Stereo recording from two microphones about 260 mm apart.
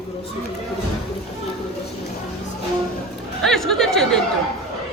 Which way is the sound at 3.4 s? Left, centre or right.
Centre.